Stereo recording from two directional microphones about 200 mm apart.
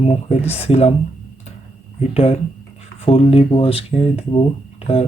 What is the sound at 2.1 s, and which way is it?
Speech, 30° left (ahead or behind).